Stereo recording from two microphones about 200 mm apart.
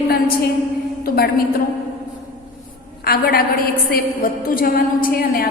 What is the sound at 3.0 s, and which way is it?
A woman's voice, 50° left (ahead or behind).